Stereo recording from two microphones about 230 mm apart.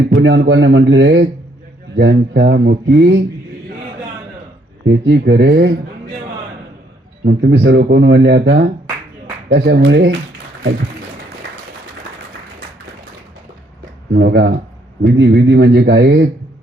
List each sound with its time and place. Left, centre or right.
0.1 s speech: right
4.9 s speech: right
7.3 s speech: right
14.1 s speech: right